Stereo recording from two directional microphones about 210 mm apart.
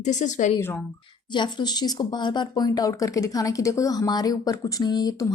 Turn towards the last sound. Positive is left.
turn(degrees=20)  # may be behind; listen again after turning